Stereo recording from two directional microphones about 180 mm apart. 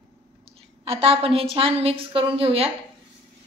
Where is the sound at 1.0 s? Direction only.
30° right (ahead or behind).